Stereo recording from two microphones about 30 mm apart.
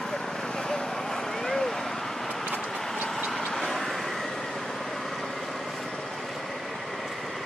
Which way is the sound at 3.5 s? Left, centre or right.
Centre.